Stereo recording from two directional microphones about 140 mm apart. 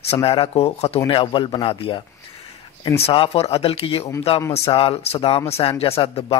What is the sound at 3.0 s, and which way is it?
Speech, 40° left (ahead or behind).